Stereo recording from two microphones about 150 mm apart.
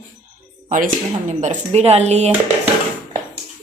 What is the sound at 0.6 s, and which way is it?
Speech, 55° right (ahead or behind).